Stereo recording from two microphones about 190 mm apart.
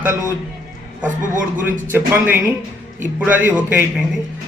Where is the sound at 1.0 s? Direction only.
45° right (ahead or behind).